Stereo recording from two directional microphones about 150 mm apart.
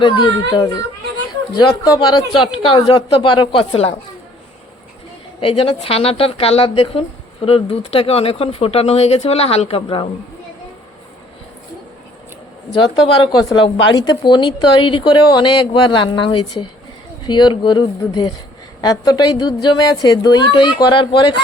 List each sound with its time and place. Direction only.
0.5 s a woman's voice: 25° left (ahead or behind)
5.4 s a woman's voice: 35° left (ahead or behind)
13.3 s a woman's voice: 25° left (ahead or behind)